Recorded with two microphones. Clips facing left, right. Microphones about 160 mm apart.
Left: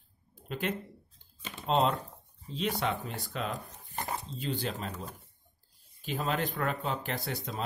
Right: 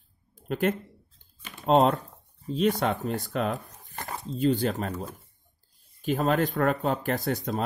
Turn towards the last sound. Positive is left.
turn(degrees=-45)  # may be behind; listen again after turning